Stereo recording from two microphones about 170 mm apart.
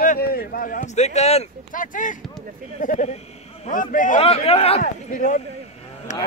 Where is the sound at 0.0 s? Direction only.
55° left (ahead or behind).